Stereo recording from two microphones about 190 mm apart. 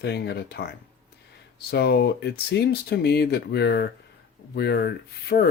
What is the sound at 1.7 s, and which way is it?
Speech, 60° left (ahead or behind).